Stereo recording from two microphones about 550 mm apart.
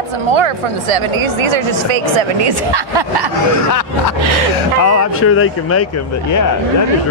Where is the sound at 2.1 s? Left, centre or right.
Right.